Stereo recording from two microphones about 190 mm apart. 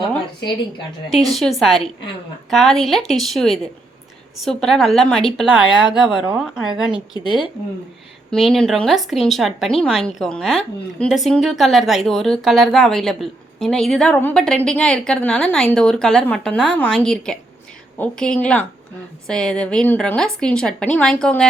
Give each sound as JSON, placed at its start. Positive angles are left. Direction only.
{"t": 1.3, "sound": "speech", "side_deg": 0}
{"t": 7.1, "sound": "speech", "side_deg": 25}
{"t": 8.4, "sound": "a woman's voice", "side_deg": 0}